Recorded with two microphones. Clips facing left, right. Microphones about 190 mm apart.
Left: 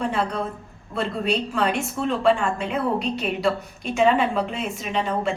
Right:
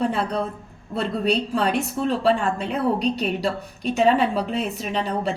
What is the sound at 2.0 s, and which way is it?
A woman's voice, 35° right (ahead or behind).